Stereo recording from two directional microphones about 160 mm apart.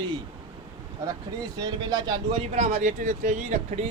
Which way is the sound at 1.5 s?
25° right (ahead or behind).